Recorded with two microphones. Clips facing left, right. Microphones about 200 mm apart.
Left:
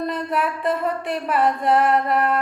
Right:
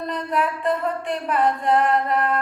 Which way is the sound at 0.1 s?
5° left (ahead or behind).